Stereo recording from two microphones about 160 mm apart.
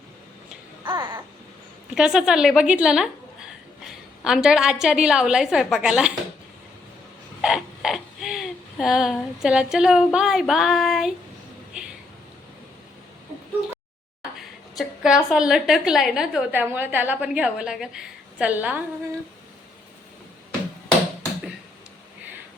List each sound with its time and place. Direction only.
0.9 s babbling: 30° right (ahead or behind)
2.0 s a woman's voice: 5° right (ahead or behind)
4.2 s a woman's voice: 5° right (ahead or behind)
7.4 s creak: centre (ahead or behind)
14.8 s a woman's voice: 5° right (ahead or behind)